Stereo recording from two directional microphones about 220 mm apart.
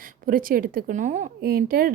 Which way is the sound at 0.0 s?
40° right (ahead or behind).